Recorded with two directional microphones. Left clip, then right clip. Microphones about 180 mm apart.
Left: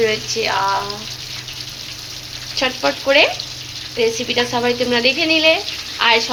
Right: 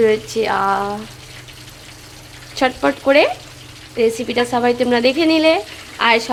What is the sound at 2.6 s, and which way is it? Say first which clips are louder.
A woman's voice: right 2 dB; 65° right (ahead or behind).